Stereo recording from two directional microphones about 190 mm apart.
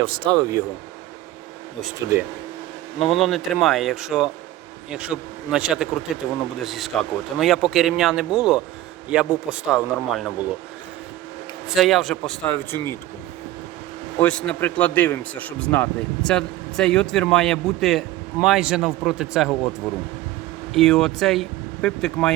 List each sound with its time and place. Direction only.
0.0 s speech: 25° right (ahead or behind)
2.0 s speech: 15° right (ahead or behind)
3.0 s speech: centre (ahead or behind)
11.7 s speech: centre (ahead or behind)
14.2 s speech: 5° left (ahead or behind)
20.7 s speech: centre (ahead or behind)